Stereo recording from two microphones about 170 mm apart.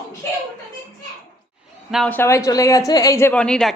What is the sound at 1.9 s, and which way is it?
Speech, centre (ahead or behind).